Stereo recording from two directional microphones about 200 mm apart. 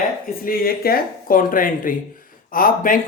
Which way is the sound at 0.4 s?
45° left (ahead or behind).